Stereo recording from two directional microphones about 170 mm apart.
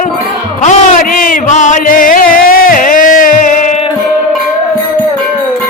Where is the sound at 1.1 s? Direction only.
55° left (ahead or behind).